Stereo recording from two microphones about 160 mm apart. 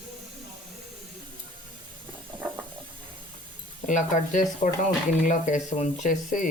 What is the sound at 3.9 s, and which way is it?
Stir, 55° left (ahead or behind).